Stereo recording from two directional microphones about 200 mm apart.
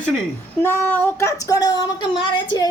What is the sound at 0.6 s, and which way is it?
Speech, 10° left (ahead or behind).